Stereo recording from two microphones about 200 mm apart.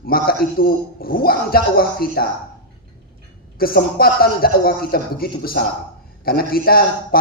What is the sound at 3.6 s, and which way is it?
A man's voice, 50° left (ahead or behind).